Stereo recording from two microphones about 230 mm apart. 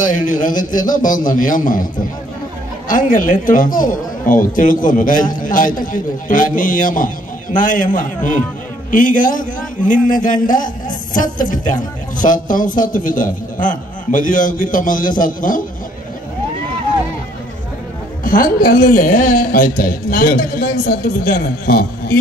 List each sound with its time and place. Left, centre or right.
0.0 s a man's voice: left
2.9 s a man's voice: left
18.2 s a man's voice: left